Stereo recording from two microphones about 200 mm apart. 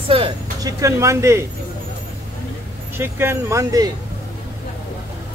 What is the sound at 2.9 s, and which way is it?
Speech, 10° right (ahead or behind).